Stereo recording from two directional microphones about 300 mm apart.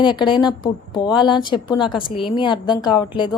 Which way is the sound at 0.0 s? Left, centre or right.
Centre.